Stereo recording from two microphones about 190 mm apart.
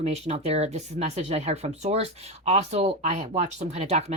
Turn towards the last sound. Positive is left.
turn(degrees=-35)  # may be behind; listen again after turning